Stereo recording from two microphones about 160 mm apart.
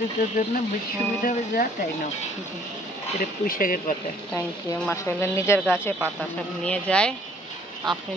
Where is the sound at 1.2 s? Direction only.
60° left (ahead or behind).